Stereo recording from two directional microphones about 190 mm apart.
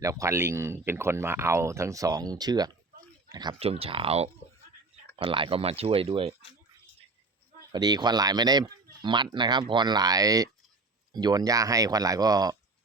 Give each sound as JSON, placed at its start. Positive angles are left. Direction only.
{"t": 0.0, "sound": "speech", "side_deg": -15}
{"t": 7.7, "sound": "speech", "side_deg": -20}